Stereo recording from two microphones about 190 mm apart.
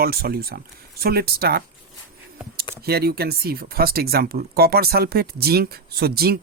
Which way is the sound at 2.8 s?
55° right (ahead or behind).